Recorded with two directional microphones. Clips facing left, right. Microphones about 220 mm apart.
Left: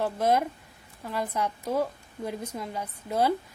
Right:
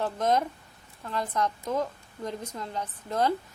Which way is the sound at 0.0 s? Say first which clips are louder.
Left 1 dB; 10° left (ahead or behind).